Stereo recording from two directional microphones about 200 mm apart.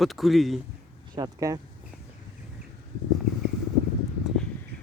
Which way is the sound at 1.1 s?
20° right (ahead or behind).